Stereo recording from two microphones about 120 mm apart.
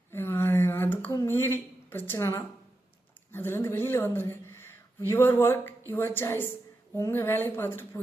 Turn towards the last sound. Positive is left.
turn(degrees=20)  # may be behind; listen again after turning